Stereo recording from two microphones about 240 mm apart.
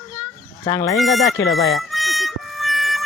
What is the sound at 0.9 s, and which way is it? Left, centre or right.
Speech, centre.